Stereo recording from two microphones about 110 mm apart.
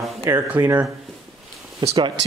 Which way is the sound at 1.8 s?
45° right (ahead or behind).